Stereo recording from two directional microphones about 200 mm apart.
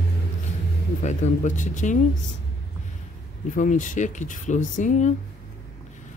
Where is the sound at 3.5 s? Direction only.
40° left (ahead or behind).